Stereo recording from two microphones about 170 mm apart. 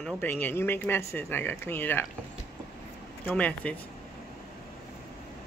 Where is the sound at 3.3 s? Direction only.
5° left (ahead or behind).